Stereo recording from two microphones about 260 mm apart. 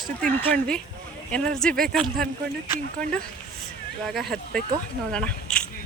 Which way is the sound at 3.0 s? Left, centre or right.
Centre.